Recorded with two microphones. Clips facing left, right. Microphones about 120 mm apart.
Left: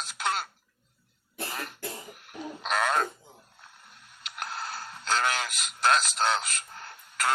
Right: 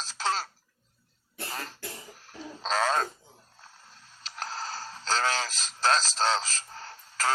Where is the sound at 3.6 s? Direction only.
30° right (ahead or behind).